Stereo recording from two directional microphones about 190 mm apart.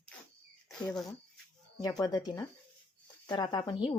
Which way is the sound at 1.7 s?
20° left (ahead or behind).